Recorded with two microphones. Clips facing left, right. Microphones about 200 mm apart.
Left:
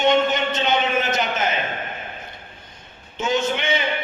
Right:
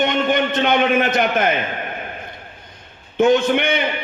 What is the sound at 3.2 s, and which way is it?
Speech, 55° right (ahead or behind).